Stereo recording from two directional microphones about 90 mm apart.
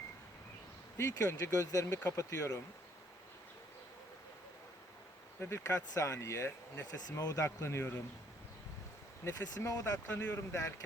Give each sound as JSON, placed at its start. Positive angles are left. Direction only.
{"t": 0.9, "sound": "speech", "side_deg": 35}
{"t": 5.4, "sound": "speech", "side_deg": 30}
{"t": 9.2, "sound": "speech", "side_deg": 35}